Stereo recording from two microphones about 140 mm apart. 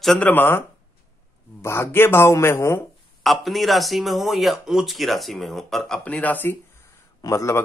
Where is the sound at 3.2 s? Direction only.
Centre (ahead or behind).